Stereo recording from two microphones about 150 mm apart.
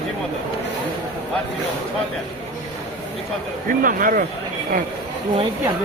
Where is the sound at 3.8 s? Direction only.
65° right (ahead or behind).